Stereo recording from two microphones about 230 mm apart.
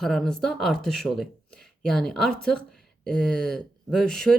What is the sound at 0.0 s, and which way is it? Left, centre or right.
Speech, centre.